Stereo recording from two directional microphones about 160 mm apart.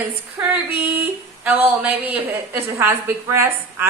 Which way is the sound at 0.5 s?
10° right (ahead or behind).